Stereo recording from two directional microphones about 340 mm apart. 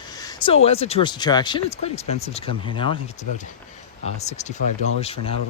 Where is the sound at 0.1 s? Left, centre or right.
Centre.